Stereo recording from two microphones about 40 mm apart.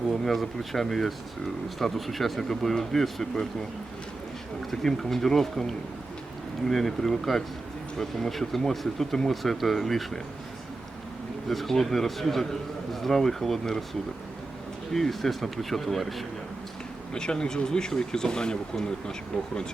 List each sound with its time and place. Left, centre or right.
0.1 s speech: centre
4.7 s speech: centre
11.4 s speech: centre
14.9 s speech: centre
17.2 s speech: centre